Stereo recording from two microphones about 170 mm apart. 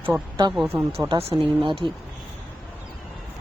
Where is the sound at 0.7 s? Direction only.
15° right (ahead or behind).